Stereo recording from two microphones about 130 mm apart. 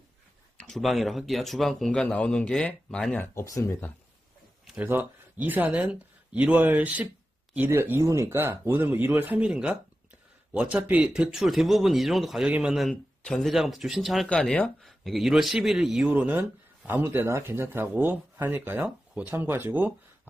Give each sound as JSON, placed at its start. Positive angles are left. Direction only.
{"t": 0.6, "sound": "speech", "side_deg": 0}
{"t": 3.3, "sound": "speech", "side_deg": 25}
{"t": 4.8, "sound": "speech", "side_deg": -15}